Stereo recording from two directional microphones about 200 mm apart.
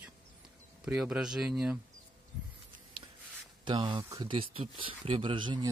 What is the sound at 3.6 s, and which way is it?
Speech, 25° right (ahead or behind).